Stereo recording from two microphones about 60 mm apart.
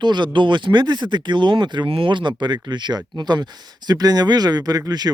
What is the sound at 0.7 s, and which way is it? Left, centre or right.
Speech, right.